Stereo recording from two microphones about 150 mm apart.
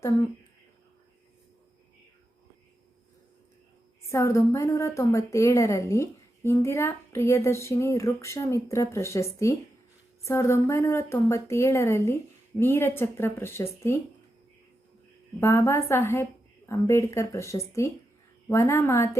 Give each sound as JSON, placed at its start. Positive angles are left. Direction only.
{"t": 4.1, "sound": "a woman's voice", "side_deg": 20}
{"t": 15.4, "sound": "a woman's voice", "side_deg": 20}